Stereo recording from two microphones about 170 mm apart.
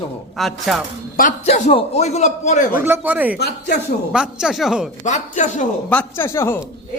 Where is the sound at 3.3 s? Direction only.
75° left (ahead or behind).